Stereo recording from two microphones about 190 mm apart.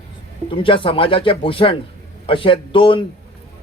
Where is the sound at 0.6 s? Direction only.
25° left (ahead or behind).